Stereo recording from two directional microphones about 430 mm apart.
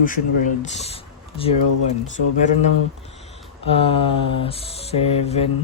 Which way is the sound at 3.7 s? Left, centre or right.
Centre.